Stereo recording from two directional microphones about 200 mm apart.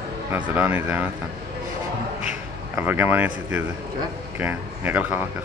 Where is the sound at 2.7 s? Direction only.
10° right (ahead or behind).